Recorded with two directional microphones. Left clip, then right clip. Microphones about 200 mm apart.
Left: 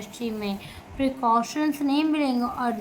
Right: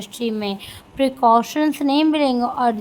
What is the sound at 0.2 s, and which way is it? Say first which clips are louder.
A woman's voice: right 7 dB; 45° right (ahead or behind).